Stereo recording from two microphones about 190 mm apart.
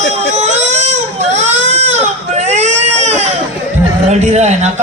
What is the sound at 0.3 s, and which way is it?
Baby cry, 35° right (ahead or behind).